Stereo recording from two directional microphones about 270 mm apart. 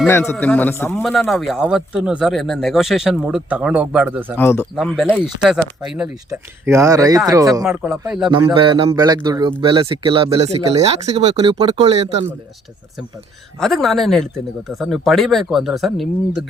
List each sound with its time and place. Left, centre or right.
0.1 s a man's voice: centre
4.4 s a man's voice: centre; by 12.2 s right
13.6 s a man's voice: centre